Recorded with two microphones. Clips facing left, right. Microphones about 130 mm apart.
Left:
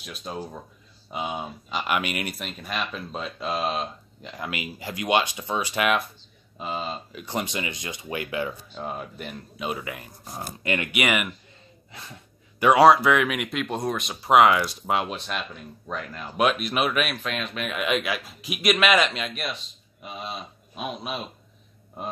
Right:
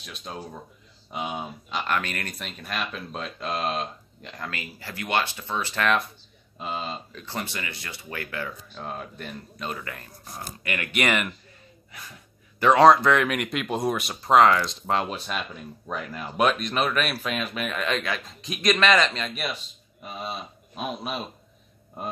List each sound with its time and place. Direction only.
0.0 s speech: centre (ahead or behind)
2.0 s a man's voice: 15° left (ahead or behind)
2.3 s speech: centre (ahead or behind)
4.5 s a man's voice: 15° left (ahead or behind)
6.6 s a man's voice: centre (ahead or behind)
8.7 s a man's voice: 5° left (ahead or behind); by 10.9 s 20° left (ahead or behind)
10.9 s a man's voice: 10° left (ahead or behind)
11.9 s speech: 25° left (ahead or behind)
12.5 s speech: 10° left (ahead or behind); by 14.1 s 5° right (ahead or behind)
14.2 s speech: 10° left (ahead or behind); by 16.4 s 5° right (ahead or behind)
16.4 s a man's voice: 5° left (ahead or behind)
17.1 s a man's voice: 5° right (ahead or behind)